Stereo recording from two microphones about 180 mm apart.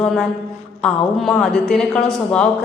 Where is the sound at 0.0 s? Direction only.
Centre (ahead or behind).